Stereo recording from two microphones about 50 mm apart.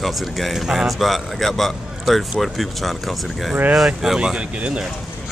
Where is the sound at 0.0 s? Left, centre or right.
Centre.